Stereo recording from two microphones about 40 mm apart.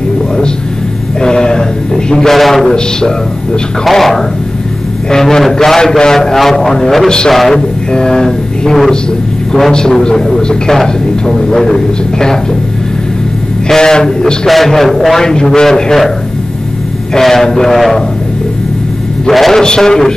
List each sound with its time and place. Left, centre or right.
1.2 s a man's voice: centre
2.3 s a man's voice: centre
3.8 s a man's voice: centre
7.9 s vehicle: centre
9.5 s speech: centre
13.7 s speech: centre
14.5 s a man's voice: centre
15.1 s speech: centre
17.2 s speech: centre
19.3 s a man's voice: centre
19.6 s a man's voice: centre